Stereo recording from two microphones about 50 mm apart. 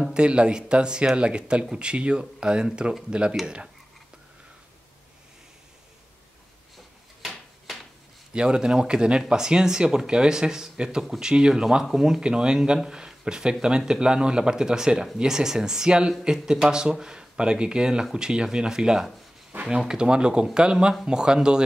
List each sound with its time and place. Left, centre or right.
0.1 s speech: centre
7.2 s a sound: centre
8.3 s speech: centre